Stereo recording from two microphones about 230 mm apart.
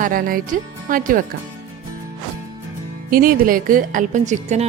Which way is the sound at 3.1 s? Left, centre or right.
Right.